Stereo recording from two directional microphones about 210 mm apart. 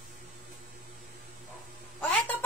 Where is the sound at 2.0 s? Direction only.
5° left (ahead or behind).